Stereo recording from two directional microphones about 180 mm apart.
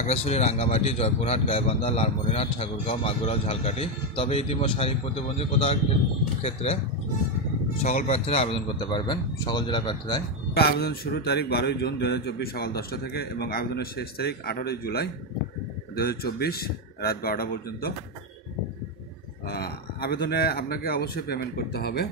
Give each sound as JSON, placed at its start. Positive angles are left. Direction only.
{"t": 0.0, "sound": "speech", "side_deg": 35}
{"t": 10.5, "sound": "a man's voice", "side_deg": 60}
{"t": 19.4, "sound": "a man's voice", "side_deg": 60}